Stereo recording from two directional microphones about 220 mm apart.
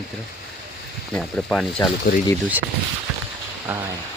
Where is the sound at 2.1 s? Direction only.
40° left (ahead or behind).